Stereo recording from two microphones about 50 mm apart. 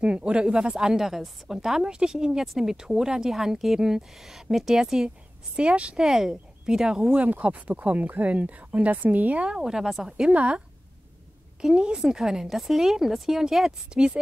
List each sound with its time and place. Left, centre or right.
0.0 s a woman's voice: centre
5.6 s speech: right
5.9 s a woman's voice: centre
7.2 s speech: right; by 10.3 s centre
10.3 s speech: right
11.6 s a woman's voice: centre